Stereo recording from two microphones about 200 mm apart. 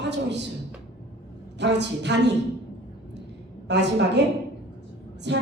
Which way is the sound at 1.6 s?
60° right (ahead or behind).